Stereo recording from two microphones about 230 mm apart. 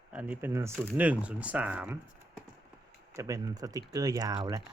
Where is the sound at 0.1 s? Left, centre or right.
Centre.